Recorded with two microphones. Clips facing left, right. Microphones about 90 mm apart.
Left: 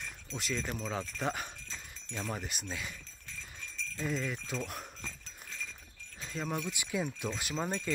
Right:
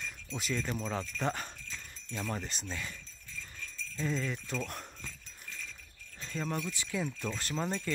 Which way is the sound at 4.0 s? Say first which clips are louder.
Right 1 dB; 10° left (ahead or behind).